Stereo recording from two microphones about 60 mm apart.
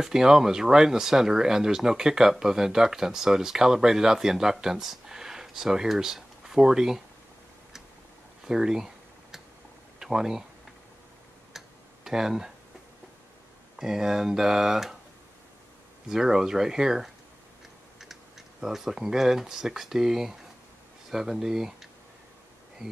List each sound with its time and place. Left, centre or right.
0.0 s speech: centre
8.5 s computer keyboard: centre
9.9 s speech: centre
11.5 s tick-tock: centre
13.7 s speech: centre
16.1 s speech: centre
18.6 s speech: centre
22.8 s speech: centre